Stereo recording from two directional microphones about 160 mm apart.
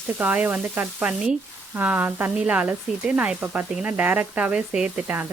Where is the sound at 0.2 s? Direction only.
10° right (ahead or behind).